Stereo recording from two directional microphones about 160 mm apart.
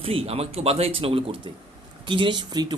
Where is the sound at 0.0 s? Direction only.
35° right (ahead or behind).